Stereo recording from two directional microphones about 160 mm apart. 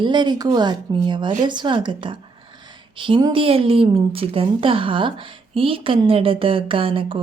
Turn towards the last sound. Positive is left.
turn(degrees=-35)  # may be behind; listen again after turning